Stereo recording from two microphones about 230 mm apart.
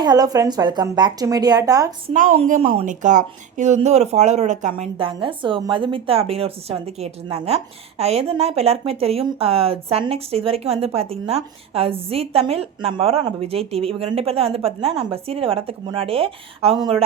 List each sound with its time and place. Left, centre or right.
0.0 s speech: centre
2.1 s a woman's voice: right